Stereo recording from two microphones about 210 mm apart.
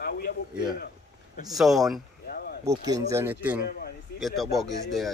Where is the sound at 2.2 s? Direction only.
45° left (ahead or behind).